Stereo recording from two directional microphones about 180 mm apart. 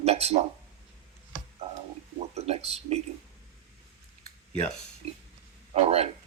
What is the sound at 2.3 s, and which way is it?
Speech, 35° right (ahead or behind).